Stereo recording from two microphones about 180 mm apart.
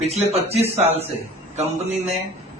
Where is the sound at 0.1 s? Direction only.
35° right (ahead or behind).